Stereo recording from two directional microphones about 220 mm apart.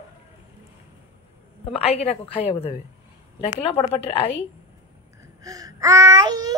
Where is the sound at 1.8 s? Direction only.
30° left (ahead or behind).